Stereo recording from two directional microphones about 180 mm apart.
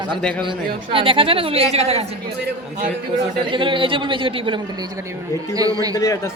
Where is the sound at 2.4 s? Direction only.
50° right (ahead or behind).